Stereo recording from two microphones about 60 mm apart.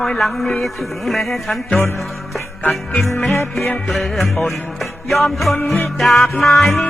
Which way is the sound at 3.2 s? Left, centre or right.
Centre.